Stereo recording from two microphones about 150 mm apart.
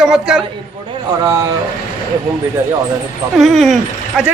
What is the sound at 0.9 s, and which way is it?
Speech, 25° right (ahead or behind).